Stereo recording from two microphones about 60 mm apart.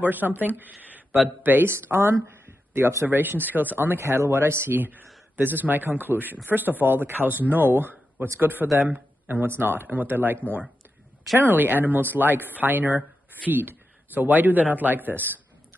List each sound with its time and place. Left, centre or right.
0.0 s speech: right
2.2 s a sound: right
3.1 s a man's voice: right